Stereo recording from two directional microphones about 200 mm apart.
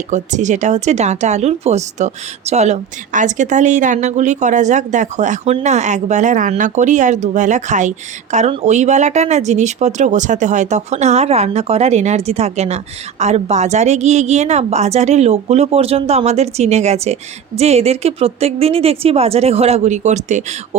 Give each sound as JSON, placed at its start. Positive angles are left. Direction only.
{"t": 0.1, "sound": "speech", "side_deg": -35}